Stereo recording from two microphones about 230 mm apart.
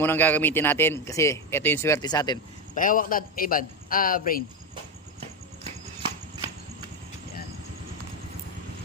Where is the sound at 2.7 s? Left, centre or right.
Left.